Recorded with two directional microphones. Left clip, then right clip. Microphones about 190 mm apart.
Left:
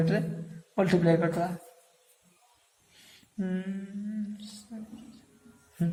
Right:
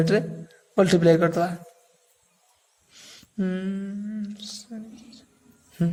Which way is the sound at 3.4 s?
50° right (ahead or behind).